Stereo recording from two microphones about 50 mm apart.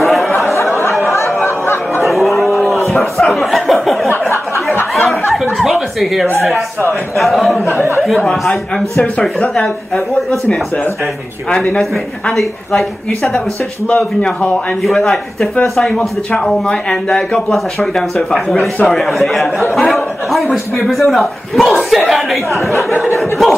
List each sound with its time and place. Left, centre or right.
0.0 s a sound: centre
2.0 s a sound: centre
5.3 s chuckle: centre
6.9 s speech: centre
8.2 s speech: centre
11.8 s speech: centre
14.8 s speech: centre
15.9 s speech: centre